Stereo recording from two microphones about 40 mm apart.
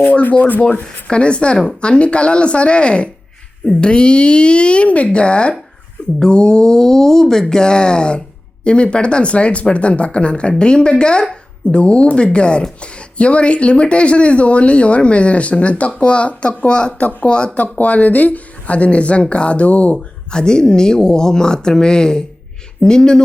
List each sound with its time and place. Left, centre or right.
0.0 s speech: left
0.6 s speech: left
17.6 s speech: left
20.3 s a woman's voice: centre